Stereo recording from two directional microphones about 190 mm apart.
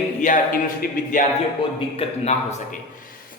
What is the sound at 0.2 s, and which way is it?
A man's voice, 45° left (ahead or behind).